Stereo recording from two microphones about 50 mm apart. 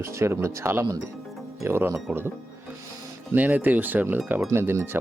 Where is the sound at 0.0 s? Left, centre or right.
Right.